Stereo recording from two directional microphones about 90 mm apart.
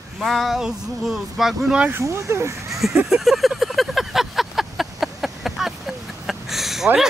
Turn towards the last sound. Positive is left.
turn(degrees=-5)  # may be behind; listen again after turning